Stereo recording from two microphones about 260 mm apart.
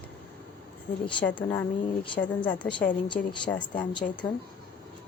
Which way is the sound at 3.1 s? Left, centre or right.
Centre.